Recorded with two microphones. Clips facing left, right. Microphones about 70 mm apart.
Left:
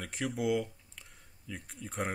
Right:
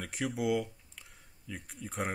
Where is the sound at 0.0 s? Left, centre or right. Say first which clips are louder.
Even; centre.